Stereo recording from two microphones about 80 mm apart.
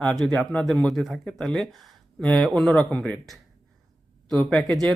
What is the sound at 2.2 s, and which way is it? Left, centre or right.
Speech, centre.